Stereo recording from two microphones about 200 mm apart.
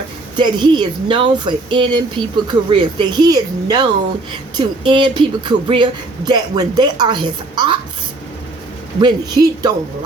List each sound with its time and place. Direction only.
0.3 s speech: 20° right (ahead or behind)
9.0 s speech: 20° right (ahead or behind)